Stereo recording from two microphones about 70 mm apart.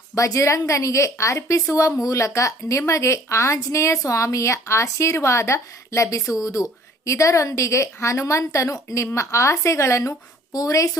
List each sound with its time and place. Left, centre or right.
0.2 s a woman's voice: left